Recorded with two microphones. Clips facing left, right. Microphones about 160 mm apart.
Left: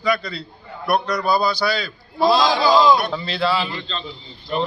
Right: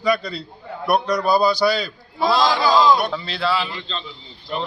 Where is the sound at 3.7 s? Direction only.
15° right (ahead or behind).